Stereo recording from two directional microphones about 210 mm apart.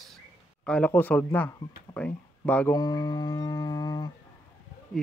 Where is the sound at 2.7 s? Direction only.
20° left (ahead or behind).